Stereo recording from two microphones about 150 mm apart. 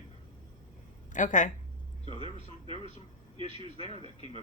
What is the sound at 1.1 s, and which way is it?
Speech, 60° left (ahead or behind).